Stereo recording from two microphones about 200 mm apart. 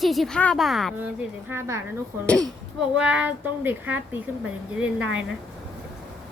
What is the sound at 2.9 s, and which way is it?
Speech, 5° right (ahead or behind).